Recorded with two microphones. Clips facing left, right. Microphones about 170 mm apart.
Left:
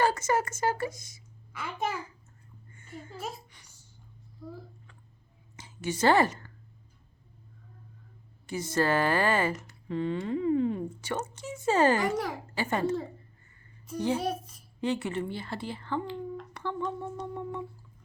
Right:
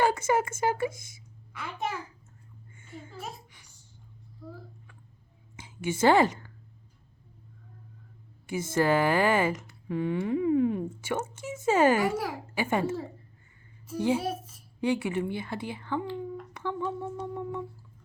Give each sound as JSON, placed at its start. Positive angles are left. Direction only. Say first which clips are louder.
{"t": 0.2, "sound": "speech", "louder": "right 2 dB", "side_deg": -55}
{"t": 1.5, "sound": "a child's voice", "louder": "left 1 dB", "side_deg": 0}
{"t": 4.4, "sound": "speech", "louder": "left 1 dB", "side_deg": 15}
{"t": 5.5, "sound": "a woman's voice", "louder": "right 2 dB", "side_deg": -10}
{"t": 8.7, "sound": "speech", "louder": "right 2 dB", "side_deg": -15}